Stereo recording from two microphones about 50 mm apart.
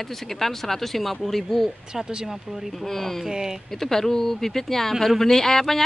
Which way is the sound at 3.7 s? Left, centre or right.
Centre.